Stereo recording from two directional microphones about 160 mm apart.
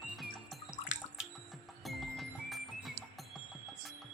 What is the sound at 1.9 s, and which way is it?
Music, centre (ahead or behind).